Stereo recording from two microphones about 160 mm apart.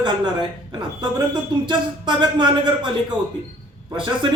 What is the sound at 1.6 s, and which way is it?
A man's voice, 30° right (ahead or behind).